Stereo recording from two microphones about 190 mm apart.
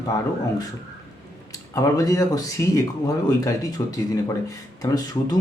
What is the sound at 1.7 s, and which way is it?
Speech, 15° left (ahead or behind).